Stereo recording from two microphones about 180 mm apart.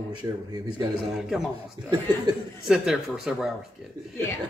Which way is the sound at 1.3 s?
Centre (ahead or behind).